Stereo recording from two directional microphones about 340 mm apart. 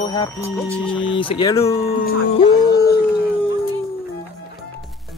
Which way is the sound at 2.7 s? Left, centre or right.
Left.